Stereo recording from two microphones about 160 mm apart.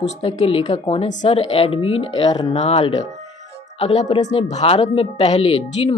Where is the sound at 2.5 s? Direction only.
40° left (ahead or behind).